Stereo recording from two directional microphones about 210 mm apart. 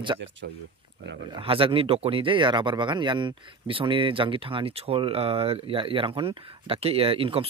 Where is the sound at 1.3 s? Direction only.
25° right (ahead or behind).